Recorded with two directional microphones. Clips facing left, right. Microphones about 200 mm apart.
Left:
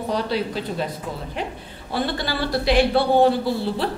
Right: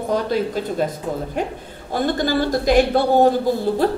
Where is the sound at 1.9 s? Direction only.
45° right (ahead or behind).